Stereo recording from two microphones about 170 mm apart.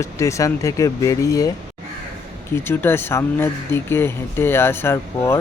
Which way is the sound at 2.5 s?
15° left (ahead or behind).